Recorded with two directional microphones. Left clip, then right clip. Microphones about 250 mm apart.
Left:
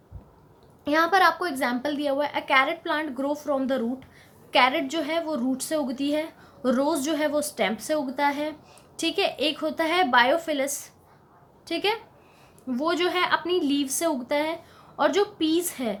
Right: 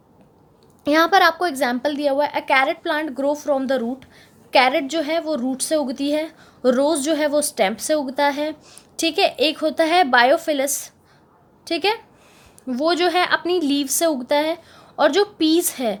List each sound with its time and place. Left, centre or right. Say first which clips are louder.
0.9 s a woman's voice: right 5 dB; right